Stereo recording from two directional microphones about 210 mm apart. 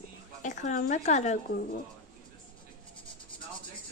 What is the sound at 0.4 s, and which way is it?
Speech, 35° left (ahead or behind).